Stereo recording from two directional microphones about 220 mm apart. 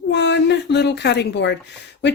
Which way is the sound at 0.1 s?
55° left (ahead or behind).